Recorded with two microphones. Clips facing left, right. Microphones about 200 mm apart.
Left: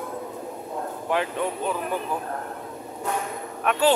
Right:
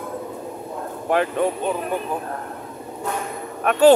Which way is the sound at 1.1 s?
50° right (ahead or behind).